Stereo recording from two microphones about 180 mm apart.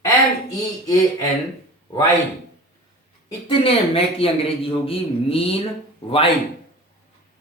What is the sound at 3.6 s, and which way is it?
A man's voice, 30° left (ahead or behind).